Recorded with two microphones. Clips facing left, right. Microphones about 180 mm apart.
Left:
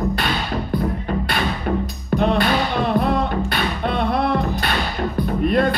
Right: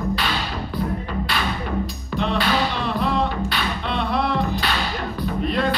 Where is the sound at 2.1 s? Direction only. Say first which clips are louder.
Left 4 dB; 50° left (ahead or behind).